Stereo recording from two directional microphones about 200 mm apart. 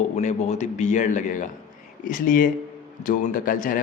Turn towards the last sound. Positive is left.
turn(degrees=45)  # may be behind; listen again after turning